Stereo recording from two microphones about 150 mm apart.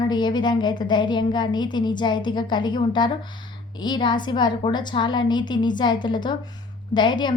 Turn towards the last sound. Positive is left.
turn(degrees=30)  # may be behind; listen again after turning